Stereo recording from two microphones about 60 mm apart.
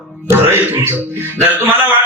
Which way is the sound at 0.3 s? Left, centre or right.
Right.